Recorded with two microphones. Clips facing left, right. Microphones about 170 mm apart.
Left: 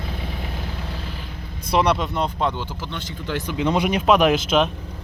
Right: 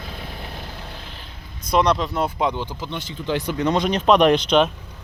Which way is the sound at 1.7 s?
5° left (ahead or behind).